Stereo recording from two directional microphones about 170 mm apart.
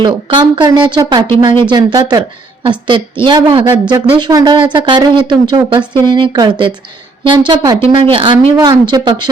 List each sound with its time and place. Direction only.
0.0 s speech: 30° right (ahead or behind)